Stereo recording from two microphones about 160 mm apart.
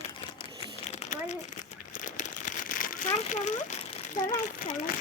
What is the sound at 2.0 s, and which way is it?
Crumpling, 50° left (ahead or behind).